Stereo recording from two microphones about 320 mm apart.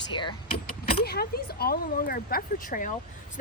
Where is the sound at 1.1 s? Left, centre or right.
Left.